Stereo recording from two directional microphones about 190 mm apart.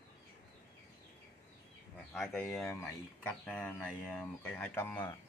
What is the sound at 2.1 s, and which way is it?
Speech, 5° left (ahead or behind).